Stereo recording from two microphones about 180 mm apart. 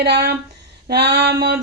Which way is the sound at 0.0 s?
65° right (ahead or behind).